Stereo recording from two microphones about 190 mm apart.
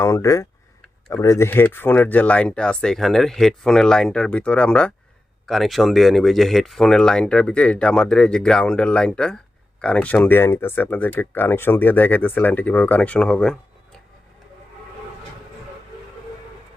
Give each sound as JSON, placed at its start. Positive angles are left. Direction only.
{"t": 0.0, "sound": "speech", "side_deg": 15}